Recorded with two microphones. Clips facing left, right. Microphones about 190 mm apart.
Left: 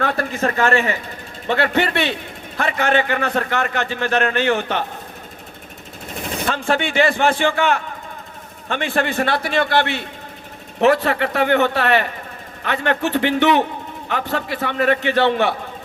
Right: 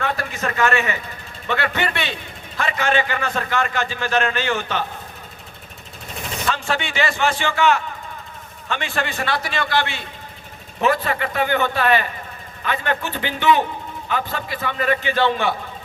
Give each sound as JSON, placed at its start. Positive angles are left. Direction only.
{"t": 0.0, "sound": "speech", "side_deg": 35}
{"t": 2.6, "sound": "a man's voice", "side_deg": 60}
{"t": 6.5, "sound": "a man's voice", "side_deg": 55}